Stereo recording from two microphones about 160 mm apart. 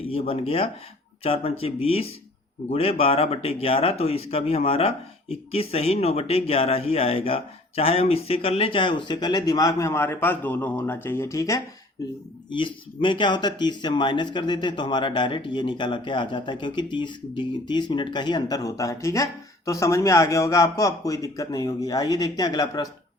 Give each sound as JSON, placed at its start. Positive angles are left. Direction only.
{"t": 0.1, "sound": "speech", "side_deg": 35}
{"t": 12.5, "sound": "speech", "side_deg": 30}